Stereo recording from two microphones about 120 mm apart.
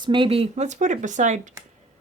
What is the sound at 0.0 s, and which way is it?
Speech, 45° right (ahead or behind).